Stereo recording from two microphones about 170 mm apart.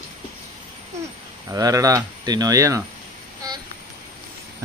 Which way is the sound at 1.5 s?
20° right (ahead or behind).